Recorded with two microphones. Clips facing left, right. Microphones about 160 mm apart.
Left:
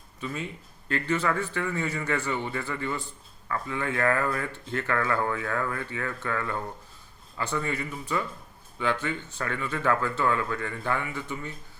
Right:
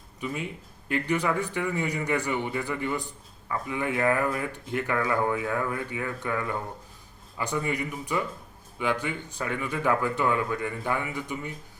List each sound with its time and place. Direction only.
0.2 s speech: 15° right (ahead or behind)